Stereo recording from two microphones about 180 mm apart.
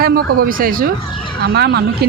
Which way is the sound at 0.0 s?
55° right (ahead or behind).